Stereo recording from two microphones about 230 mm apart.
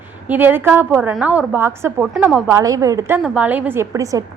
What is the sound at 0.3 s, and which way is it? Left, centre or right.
A woman's voice, centre.